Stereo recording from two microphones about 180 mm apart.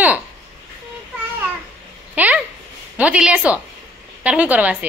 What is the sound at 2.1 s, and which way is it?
A child's voice, 10° right (ahead or behind).